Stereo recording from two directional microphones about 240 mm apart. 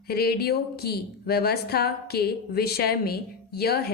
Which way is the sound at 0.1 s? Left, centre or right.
Left.